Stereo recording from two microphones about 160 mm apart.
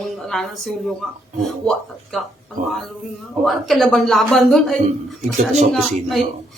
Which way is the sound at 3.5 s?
Centre (ahead or behind).